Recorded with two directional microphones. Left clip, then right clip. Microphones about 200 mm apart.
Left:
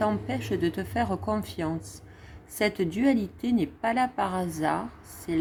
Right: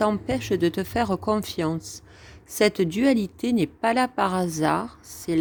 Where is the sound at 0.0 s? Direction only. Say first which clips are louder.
Right 4 dB; 40° right (ahead or behind).